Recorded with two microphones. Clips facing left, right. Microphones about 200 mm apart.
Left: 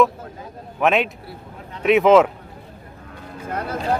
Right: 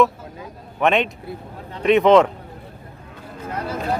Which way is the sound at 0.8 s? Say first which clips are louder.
Even; centre (ahead or behind).